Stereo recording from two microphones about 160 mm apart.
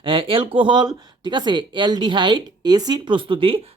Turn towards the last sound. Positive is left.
turn(degrees=-35)  # may be behind; listen again after turning